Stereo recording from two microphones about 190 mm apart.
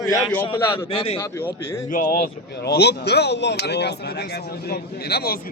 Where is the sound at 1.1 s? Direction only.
15° left (ahead or behind).